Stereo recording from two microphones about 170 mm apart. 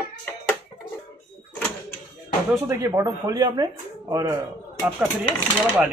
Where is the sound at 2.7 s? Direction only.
15° right (ahead or behind).